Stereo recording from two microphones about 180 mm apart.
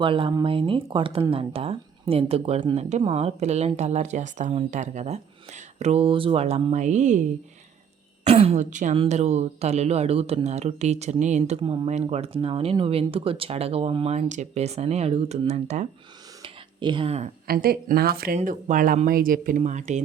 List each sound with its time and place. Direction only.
0.0 s speech: 30° right (ahead or behind)
8.3 s speech: 35° right (ahead or behind)
16.4 s a sound: 30° right (ahead or behind)
17.4 s speech: 55° right (ahead or behind)
18.3 s speech: 45° right (ahead or behind)